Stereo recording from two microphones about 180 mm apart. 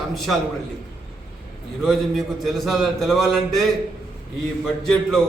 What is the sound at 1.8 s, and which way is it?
A man's voice, centre (ahead or behind).